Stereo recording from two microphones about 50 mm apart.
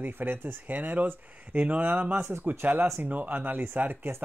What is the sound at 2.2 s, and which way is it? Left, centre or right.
Speech, right.